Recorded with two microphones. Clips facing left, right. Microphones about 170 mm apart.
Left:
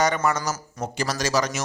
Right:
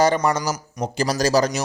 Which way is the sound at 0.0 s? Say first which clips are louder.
Right 4 dB; 35° right (ahead or behind).